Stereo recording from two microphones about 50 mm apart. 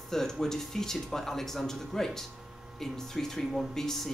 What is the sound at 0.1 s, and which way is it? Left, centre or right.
Speech, centre.